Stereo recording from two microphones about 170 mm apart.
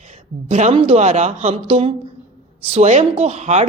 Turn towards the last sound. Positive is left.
turn(degrees=-40)  # may be behind; listen again after turning